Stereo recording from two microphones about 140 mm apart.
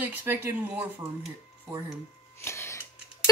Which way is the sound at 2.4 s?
20° left (ahead or behind).